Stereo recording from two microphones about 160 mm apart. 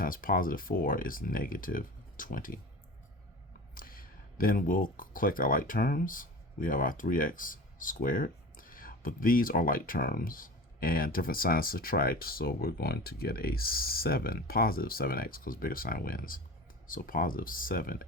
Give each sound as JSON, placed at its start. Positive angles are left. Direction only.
{"t": 0.0, "sound": "speech", "side_deg": 60}
{"t": 3.8, "sound": "speech", "side_deg": 65}